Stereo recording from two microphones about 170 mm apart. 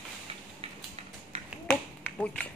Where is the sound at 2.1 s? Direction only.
5° left (ahead or behind).